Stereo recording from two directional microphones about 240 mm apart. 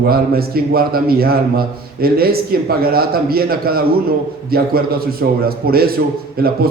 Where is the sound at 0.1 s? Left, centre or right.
Right.